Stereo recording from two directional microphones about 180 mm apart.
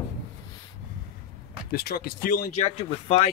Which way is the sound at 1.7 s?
60° left (ahead or behind).